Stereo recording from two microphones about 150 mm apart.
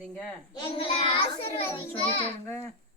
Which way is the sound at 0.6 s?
35° left (ahead or behind).